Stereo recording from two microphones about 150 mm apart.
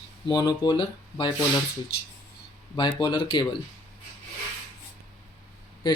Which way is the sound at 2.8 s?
30° left (ahead or behind).